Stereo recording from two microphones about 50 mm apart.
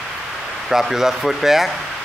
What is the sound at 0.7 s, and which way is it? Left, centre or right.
Speech, centre.